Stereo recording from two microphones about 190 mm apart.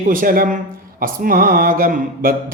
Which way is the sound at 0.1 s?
50° right (ahead or behind).